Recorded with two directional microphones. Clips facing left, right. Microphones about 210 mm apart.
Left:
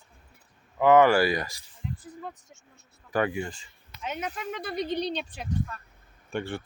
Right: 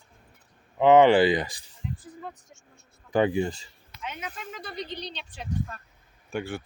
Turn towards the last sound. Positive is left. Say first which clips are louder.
# even
turn(degrees=-5)  # may be behind; listen again after turning